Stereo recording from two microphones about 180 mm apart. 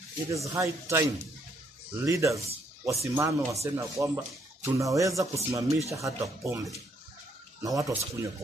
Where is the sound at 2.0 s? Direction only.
15° right (ahead or behind).